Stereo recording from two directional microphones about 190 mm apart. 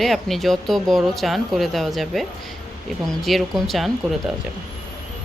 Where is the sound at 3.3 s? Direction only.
Centre (ahead or behind).